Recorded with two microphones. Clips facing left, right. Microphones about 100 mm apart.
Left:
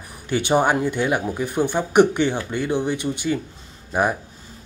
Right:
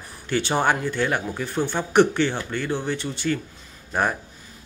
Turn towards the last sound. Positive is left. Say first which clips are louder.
# left 3 dB
turn(degrees=10)  # may be behind; listen again after turning